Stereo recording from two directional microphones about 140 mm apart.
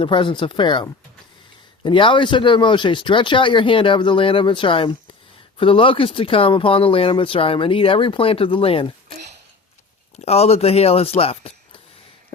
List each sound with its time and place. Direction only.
0.0 s speech: 35° left (ahead or behind)
10.2 s speech: 50° left (ahead or behind)